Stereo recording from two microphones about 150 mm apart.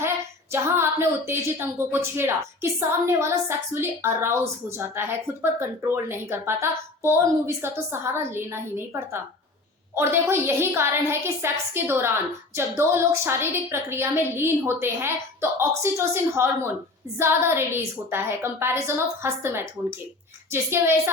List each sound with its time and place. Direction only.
0.5 s a woman's voice: 15° right (ahead or behind)